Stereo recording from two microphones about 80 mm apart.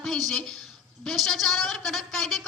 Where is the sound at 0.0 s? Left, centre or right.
Centre.